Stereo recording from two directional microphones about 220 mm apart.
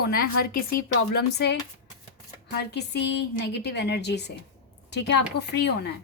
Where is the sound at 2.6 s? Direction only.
50° left (ahead or behind).